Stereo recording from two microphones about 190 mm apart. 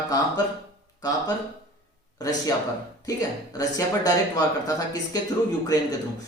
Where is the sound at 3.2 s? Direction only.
20° left (ahead or behind).